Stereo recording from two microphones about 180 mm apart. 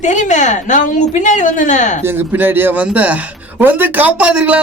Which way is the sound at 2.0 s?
10° right (ahead or behind).